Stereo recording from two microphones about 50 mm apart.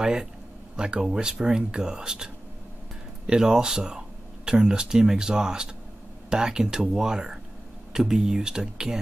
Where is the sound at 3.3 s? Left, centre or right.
Centre.